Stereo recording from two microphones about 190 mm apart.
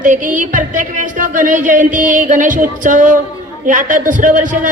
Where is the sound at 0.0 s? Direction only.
45° right (ahead or behind).